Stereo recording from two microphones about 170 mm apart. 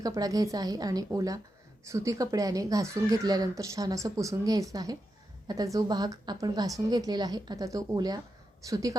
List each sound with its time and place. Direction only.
0.0 s speech: 20° right (ahead or behind)